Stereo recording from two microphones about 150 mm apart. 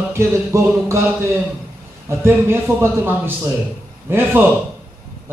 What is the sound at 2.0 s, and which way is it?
Speech, 15° right (ahead or behind).